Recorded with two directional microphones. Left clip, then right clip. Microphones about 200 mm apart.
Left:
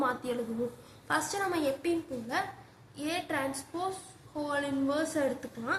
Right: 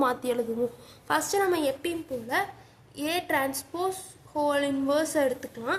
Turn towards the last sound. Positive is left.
turn(degrees=-50)  # may be behind; listen again after turning